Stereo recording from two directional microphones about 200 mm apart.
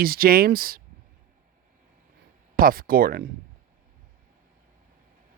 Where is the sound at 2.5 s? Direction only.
45° right (ahead or behind).